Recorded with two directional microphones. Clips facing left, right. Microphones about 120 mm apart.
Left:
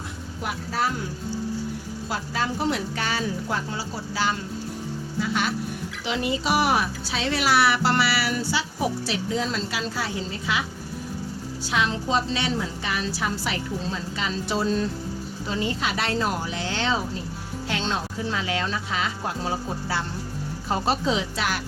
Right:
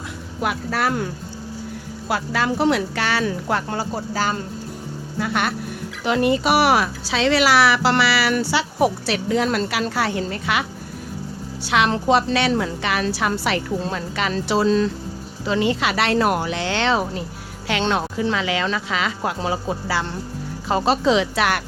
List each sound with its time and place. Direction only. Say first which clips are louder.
0.4 s speech: right 5 dB; 70° right (ahead or behind)
2.0 s speech: right 6 dB; 75° right (ahead or behind); by 4.4 s 45° right (ahead or behind)
5.2 s a woman's voice: right 3 dB; 60° right (ahead or behind); by 14.8 s 90° right
15.4 s speech: right 7 dB; 80° right